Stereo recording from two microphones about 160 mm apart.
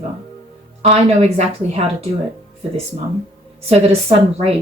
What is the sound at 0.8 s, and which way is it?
Speech, 40° right (ahead or behind).